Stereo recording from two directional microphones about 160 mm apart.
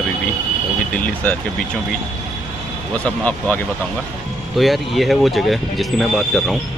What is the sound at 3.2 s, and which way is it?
Speech, 10° left (ahead or behind).